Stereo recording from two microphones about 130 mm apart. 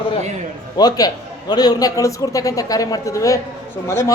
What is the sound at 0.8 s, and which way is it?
A man's voice, 30° left (ahead or behind).